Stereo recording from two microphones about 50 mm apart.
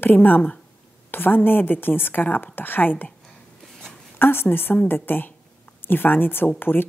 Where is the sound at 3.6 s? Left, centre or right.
Centre.